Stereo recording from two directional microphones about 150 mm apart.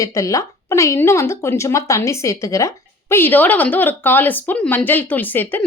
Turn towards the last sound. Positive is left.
turn(degrees=10)  # may be behind; listen again after turning